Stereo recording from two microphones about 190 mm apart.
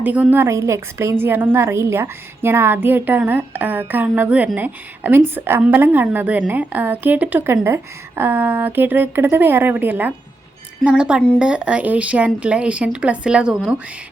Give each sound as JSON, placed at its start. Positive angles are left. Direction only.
{"t": 0.0, "sound": "a woman's voice", "side_deg": -10}